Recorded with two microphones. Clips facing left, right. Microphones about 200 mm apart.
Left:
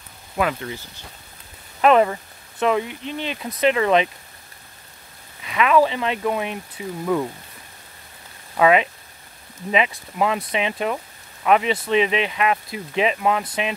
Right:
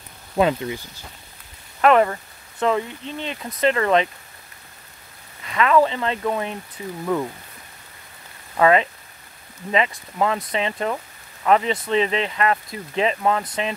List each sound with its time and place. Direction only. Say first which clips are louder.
0.4 s speech: right 4 dB; 20° right (ahead or behind)
1.8 s speech: even; 20° left (ahead or behind)
5.4 s speech: even; 15° left (ahead or behind)
8.5 s speech: even; 10° left (ahead or behind)